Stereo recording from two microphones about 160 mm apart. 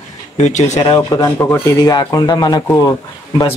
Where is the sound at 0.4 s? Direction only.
45° left (ahead or behind).